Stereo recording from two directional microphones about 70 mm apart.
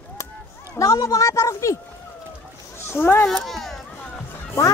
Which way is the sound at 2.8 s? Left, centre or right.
Left.